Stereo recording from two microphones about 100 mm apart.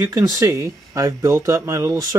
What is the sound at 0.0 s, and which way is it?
Speech, 30° right (ahead or behind).